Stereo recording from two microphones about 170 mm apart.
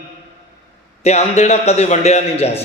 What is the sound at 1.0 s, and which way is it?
A man's voice, 40° left (ahead or behind).